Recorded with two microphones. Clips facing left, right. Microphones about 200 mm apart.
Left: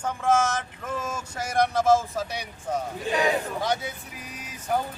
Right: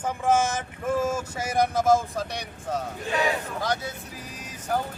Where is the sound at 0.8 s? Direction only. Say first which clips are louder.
Right 7 dB; 10° right (ahead or behind); by 3.2 s 10° left (ahead or behind).